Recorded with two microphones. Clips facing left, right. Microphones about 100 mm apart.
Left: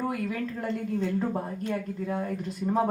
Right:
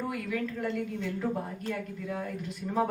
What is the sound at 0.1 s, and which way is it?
A woman's voice, 30° left (ahead or behind).